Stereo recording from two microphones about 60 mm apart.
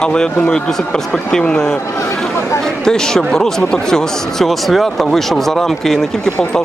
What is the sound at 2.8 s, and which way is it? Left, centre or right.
Speech, centre.